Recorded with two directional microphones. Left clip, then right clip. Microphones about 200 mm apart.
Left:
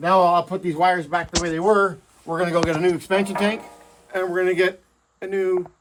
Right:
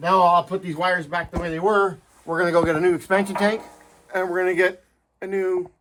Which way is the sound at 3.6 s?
Centre (ahead or behind).